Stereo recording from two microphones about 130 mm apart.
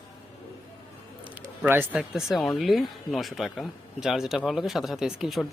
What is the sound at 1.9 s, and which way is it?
Speech, 5° right (ahead or behind).